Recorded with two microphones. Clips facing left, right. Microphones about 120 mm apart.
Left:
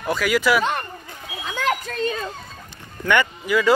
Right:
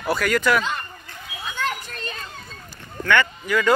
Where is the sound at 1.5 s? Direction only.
90° left.